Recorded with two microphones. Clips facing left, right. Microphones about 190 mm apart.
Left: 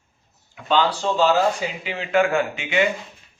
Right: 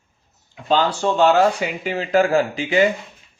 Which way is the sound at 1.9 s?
35° right (ahead or behind).